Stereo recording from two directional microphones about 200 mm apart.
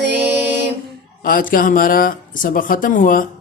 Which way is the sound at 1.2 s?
45° left (ahead or behind).